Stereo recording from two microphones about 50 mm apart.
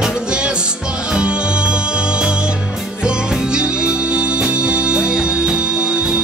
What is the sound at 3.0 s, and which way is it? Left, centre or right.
Music, centre.